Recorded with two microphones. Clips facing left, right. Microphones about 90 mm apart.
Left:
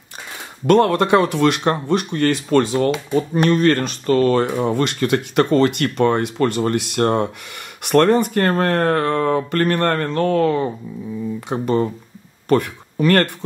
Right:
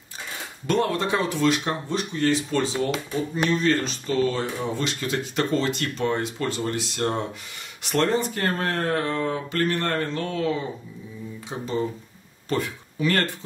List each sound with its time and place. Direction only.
0.7 s speech: 60° left (ahead or behind)